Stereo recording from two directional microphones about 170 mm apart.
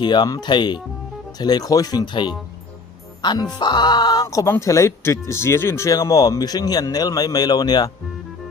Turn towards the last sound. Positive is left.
turn(degrees=25)  # may be behind; listen again after turning